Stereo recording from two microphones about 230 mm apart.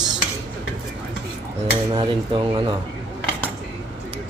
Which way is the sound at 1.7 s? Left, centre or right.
Right.